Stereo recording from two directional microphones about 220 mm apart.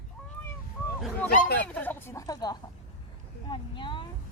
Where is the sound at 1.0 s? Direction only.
5° left (ahead or behind).